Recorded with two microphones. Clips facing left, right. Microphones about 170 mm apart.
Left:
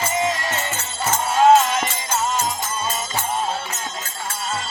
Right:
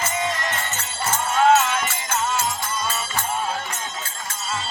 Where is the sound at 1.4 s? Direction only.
35° left (ahead or behind).